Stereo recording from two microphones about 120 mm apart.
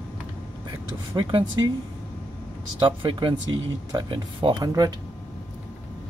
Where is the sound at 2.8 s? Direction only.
40° right (ahead or behind).